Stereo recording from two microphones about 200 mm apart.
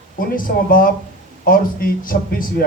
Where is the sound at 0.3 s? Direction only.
45° left (ahead or behind).